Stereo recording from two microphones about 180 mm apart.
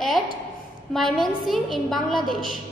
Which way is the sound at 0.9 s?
Centre (ahead or behind).